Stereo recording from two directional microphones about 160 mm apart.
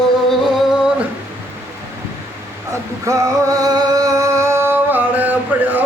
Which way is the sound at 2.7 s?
20° right (ahead or behind).